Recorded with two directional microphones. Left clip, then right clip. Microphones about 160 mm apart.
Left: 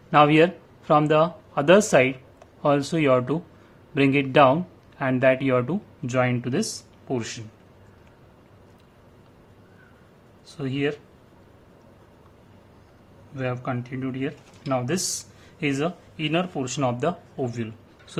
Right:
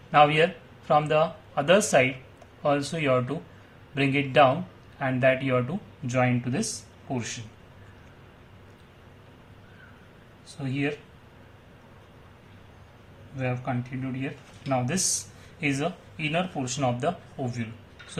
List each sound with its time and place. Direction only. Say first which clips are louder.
0.1 s speech: left 3 dB; 50° left (ahead or behind)
10.5 s speech: left 4 dB; 45° left (ahead or behind)
13.3 s speech: left 2 dB; 45° left (ahead or behind)